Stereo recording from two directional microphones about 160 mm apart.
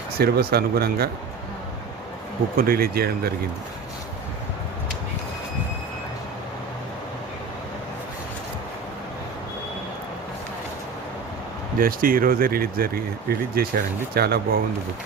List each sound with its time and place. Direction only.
0.2 s speech: 75° right (ahead or behind)
2.6 s speech: 65° right (ahead or behind)
11.8 s speech: 65° right (ahead or behind)